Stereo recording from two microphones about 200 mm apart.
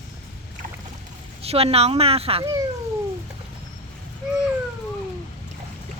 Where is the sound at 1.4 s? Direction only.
30° right (ahead or behind).